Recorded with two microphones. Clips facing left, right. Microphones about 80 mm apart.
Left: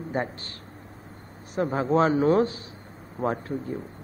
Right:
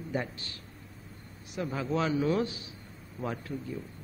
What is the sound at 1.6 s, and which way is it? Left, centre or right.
Speech, left.